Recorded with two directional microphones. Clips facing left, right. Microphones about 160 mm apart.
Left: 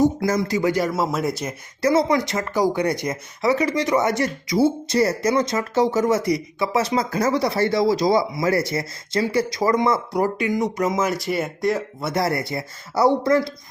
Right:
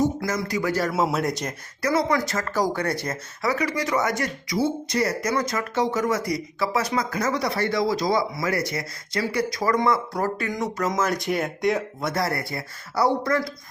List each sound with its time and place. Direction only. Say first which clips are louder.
0.2 s speech: left 5 dB; 25° left (ahead or behind)
0.9 s speech: even; 5° right (ahead or behind)
1.2 s speech: left 2 dB; 5° left (ahead or behind)
1.8 s speech: left 4 dB; 25° left (ahead or behind); by 12.1 s centre (ahead or behind)
12.1 s speech: left 6 dB; 25° left (ahead or behind)